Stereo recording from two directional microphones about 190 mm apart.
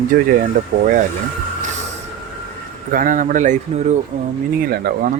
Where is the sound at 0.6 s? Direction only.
50° right (ahead or behind).